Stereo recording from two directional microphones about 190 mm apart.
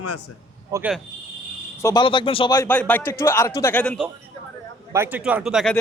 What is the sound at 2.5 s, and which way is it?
Speech, 10° left (ahead or behind).